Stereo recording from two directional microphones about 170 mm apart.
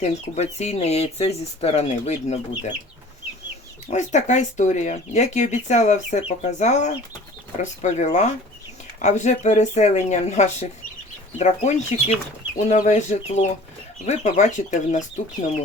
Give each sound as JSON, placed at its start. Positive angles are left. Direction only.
{"t": 0.0, "sound": "speech", "side_deg": 40}
{"t": 3.8, "sound": "speech", "side_deg": 45}